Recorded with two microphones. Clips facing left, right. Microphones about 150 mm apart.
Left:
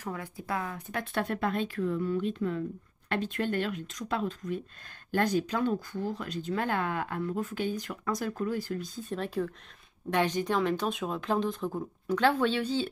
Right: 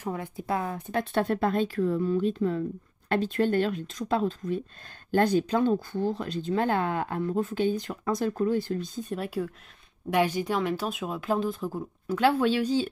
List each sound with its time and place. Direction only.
0.0 s speech: 20° right (ahead or behind)
9.1 s speech: 10° right (ahead or behind)